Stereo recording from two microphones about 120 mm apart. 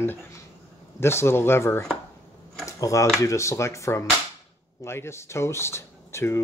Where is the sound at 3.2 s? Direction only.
25° left (ahead or behind).